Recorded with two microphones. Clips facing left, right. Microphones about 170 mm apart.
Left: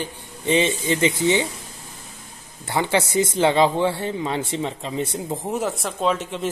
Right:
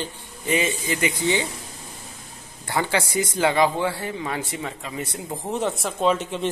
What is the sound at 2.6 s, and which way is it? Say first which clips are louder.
Speech: left 3 dB; 20° left (ahead or behind).